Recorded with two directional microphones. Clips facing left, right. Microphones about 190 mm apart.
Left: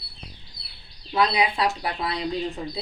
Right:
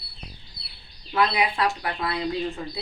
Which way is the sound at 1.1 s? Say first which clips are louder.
Left 1 dB; 15° left (ahead or behind).